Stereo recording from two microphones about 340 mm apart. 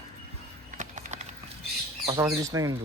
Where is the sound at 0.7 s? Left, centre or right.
Centre.